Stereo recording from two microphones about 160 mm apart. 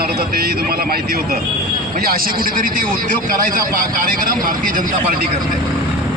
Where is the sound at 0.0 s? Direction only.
75° right (ahead or behind).